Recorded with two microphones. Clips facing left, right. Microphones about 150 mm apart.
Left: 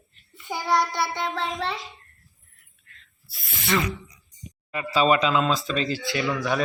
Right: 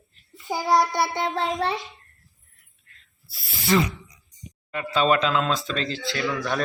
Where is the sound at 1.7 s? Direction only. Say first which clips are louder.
Right 4 dB; centre (ahead or behind).